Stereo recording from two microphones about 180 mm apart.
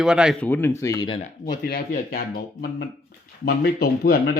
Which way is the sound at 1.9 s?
55° left (ahead or behind).